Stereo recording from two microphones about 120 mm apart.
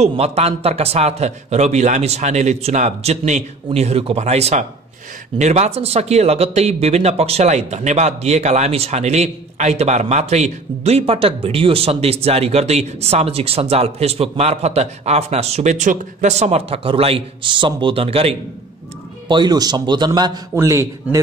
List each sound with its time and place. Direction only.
0.0 s speech: 60° right (ahead or behind)
3.7 s speech: 60° right (ahead or behind)
19.2 s speech: 40° right (ahead or behind)
20.5 s speech: 25° right (ahead or behind)